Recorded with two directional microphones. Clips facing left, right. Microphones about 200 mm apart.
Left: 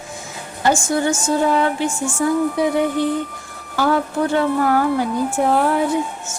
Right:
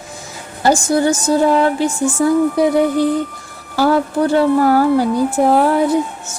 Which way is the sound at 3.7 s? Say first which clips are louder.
Right 4 dB; 35° right (ahead or behind).